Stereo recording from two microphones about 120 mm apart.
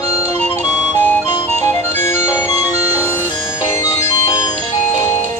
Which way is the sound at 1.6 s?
20° left (ahead or behind).